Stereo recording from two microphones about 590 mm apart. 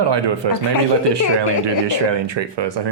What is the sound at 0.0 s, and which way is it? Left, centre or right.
Speech, right.